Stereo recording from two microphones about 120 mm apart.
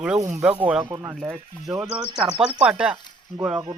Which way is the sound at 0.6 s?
10° right (ahead or behind).